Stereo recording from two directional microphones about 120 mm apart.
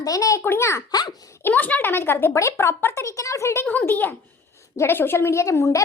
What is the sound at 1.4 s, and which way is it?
A woman's voice, 15° left (ahead or behind).